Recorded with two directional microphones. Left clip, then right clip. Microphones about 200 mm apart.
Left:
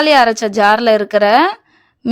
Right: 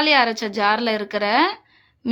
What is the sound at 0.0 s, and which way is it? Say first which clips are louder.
A woman's voice: left 7 dB; 40° left (ahead or behind).